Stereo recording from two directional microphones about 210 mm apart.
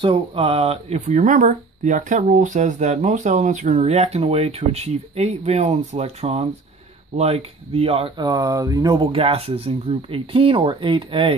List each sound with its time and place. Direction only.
0.0 s speech: 25° right (ahead or behind)